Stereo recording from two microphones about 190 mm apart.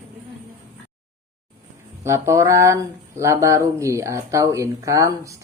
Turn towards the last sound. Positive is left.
turn(degrees=-15)  # may be behind; listen again after turning